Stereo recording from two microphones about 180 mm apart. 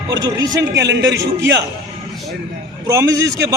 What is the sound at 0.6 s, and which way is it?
Speech, 75° right (ahead or behind).